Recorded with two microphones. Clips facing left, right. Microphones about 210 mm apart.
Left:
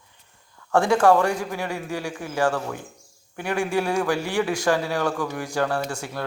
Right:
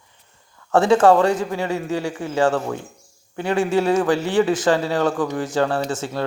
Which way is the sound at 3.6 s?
20° right (ahead or behind).